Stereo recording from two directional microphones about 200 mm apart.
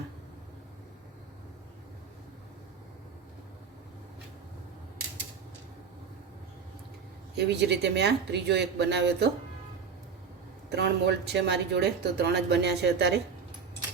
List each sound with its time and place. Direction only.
7.3 s speech: 60° right (ahead or behind)
10.7 s speech: 55° right (ahead or behind)